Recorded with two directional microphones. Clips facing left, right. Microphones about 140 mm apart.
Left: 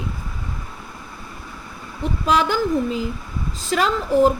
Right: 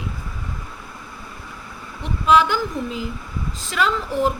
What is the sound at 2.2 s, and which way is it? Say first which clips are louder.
A woman's voice: right 2 dB; 40° left (ahead or behind).